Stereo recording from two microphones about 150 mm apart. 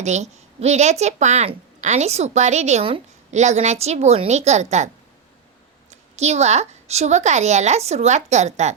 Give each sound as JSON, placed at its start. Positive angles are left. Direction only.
{"t": 0.0, "sound": "a woman's voice", "side_deg": -50}
{"t": 5.9, "sound": "a woman's voice", "side_deg": -45}